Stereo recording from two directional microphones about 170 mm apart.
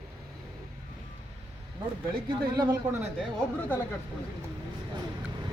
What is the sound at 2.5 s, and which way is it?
Speech, 20° right (ahead or behind).